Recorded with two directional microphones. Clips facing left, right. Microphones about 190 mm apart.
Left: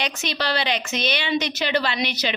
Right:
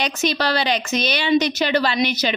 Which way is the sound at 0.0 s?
40° right (ahead or behind).